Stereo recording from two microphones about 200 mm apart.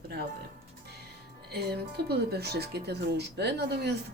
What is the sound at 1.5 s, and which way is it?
Speech, 55° right (ahead or behind).